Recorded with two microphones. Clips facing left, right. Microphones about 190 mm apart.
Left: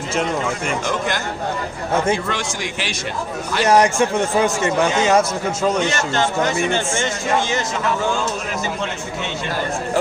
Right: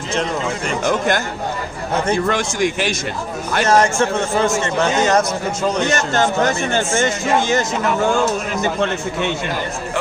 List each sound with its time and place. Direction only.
0.9 s speech: 50° right (ahead or behind)
3.7 s speech: 15° left (ahead or behind)
5.9 s speech: 45° right (ahead or behind)
8.6 s a man's voice: 60° right (ahead or behind)